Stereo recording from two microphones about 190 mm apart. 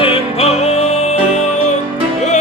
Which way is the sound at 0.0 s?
30° left (ahead or behind).